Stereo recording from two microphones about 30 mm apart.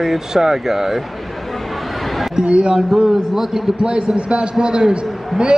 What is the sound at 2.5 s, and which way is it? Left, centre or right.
Speech, right.